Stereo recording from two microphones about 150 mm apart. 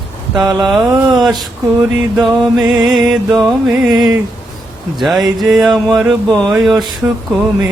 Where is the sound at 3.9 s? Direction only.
25° right (ahead or behind).